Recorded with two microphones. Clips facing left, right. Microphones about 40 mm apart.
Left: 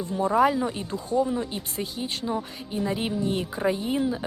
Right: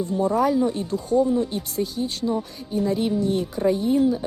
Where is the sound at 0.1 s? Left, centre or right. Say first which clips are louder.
Even; left.